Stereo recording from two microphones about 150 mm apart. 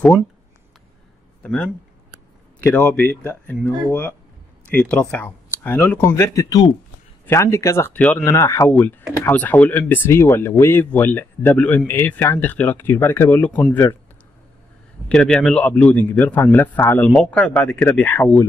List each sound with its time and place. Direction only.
1.4 s a man's voice: 10° left (ahead or behind)
8.4 s speech: 20° left (ahead or behind)
8.6 s speech: 10° left (ahead or behind)
15.0 s speech: 5° left (ahead or behind)